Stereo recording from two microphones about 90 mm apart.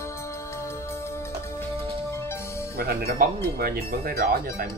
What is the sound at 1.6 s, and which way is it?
Music, 25° left (ahead or behind).